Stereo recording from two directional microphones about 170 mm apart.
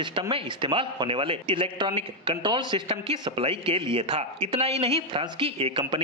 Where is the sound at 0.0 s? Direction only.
30° right (ahead or behind).